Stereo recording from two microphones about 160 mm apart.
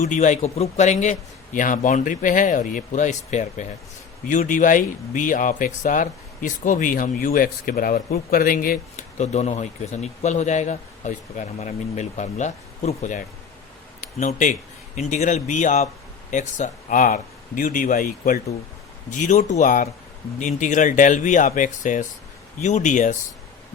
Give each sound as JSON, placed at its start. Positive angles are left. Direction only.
{"t": 0.0, "sound": "speech", "side_deg": 50}
{"t": 19.1, "sound": "speech", "side_deg": 50}